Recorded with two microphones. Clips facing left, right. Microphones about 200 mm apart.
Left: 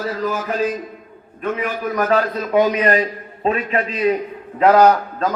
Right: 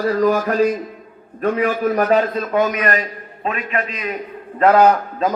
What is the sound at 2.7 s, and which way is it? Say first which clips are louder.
A man's voice: left 3 dB; 30° left (ahead or behind).